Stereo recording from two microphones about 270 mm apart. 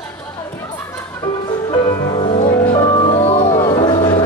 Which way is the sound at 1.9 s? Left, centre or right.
Centre.